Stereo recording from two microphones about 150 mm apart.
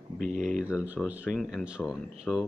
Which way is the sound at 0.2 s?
55° right (ahead or behind).